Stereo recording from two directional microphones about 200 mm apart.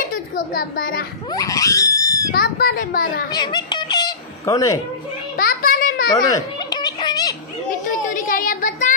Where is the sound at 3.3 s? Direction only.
20° left (ahead or behind).